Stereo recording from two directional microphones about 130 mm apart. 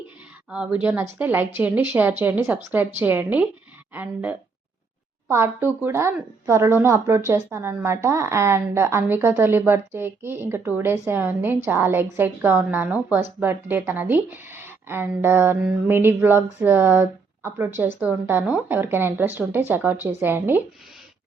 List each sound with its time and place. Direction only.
0.5 s a woman's voice: 10° right (ahead or behind)